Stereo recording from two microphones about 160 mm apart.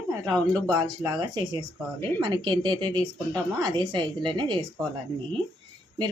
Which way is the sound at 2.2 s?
30° right (ahead or behind).